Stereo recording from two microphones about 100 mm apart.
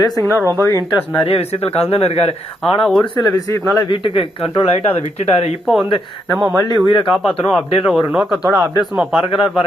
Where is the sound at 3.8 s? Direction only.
60° left (ahead or behind).